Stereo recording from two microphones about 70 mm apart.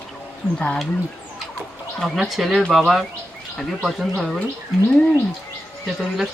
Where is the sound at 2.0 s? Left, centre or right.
Centre.